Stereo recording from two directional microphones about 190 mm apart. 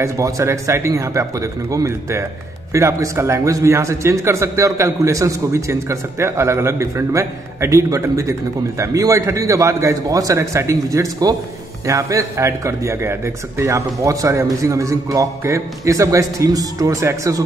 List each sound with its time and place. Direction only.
0.0 s a man's voice: 15° right (ahead or behind)